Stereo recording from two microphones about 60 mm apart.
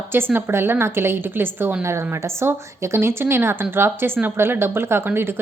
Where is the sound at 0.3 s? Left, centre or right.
Right.